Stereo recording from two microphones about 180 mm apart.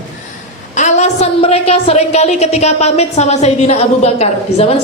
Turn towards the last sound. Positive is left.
turn(degrees=35)  # may be behind; listen again after turning